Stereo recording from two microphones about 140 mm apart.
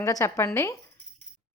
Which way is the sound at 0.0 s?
20° left (ahead or behind).